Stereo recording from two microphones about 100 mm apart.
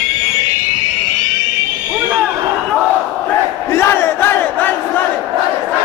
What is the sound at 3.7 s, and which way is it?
Crowd, 25° left (ahead or behind).